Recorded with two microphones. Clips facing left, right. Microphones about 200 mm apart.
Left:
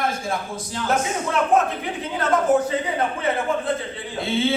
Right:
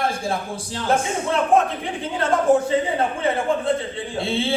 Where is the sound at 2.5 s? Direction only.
30° right (ahead or behind).